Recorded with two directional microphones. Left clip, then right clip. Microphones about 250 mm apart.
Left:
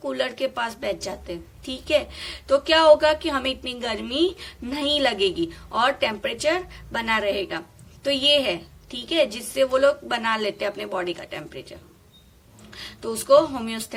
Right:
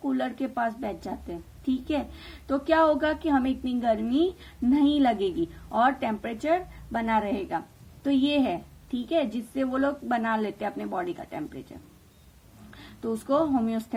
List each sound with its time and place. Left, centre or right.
0.1 s a woman's voice: centre
13.3 s a woman's voice: right